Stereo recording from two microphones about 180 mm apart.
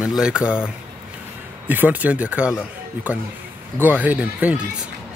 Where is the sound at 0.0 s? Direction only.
5° right (ahead or behind).